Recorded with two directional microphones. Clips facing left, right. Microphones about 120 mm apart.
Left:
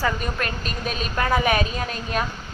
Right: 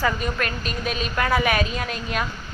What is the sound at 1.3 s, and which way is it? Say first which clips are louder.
Speech: left 1 dB; 20° left (ahead or behind).